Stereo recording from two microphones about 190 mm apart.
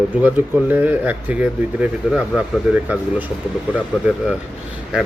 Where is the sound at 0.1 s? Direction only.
10° right (ahead or behind).